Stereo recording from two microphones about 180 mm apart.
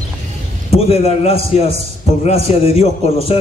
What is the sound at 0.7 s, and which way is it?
A man's voice, 35° left (ahead or behind).